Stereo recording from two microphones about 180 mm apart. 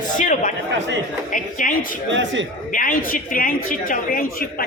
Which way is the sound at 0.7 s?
80° right.